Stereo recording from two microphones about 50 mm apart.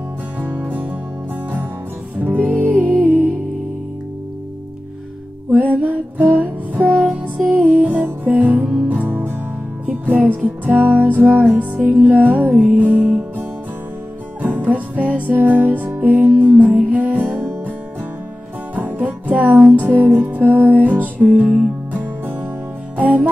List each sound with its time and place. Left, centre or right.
0.4 s music: right
2.2 s music: right
5.5 s music: right
18.8 s music: right